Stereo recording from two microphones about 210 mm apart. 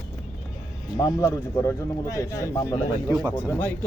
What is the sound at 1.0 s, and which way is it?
A man's voice, 15° left (ahead or behind).